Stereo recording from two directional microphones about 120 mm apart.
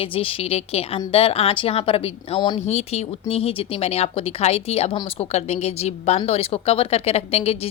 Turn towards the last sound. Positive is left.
turn(degrees=55)  # may be behind; listen again after turning